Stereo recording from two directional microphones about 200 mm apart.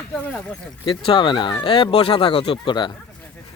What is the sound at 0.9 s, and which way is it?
Speech, 25° left (ahead or behind).